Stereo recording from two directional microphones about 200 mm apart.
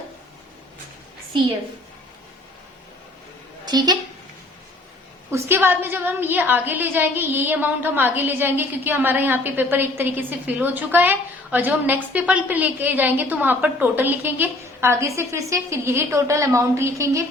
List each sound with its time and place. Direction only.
3.7 s a woman's voice: 20° right (ahead or behind)
5.3 s a woman's voice: 10° right (ahead or behind)